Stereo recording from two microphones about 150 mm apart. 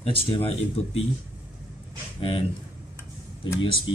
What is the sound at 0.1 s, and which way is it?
Speech, 40° left (ahead or behind).